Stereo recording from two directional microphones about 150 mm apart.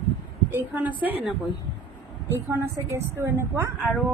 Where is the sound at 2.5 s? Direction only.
20° right (ahead or behind).